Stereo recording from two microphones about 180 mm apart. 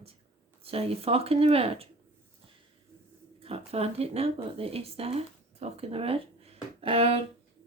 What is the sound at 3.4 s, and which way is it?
Speech, 35° right (ahead or behind).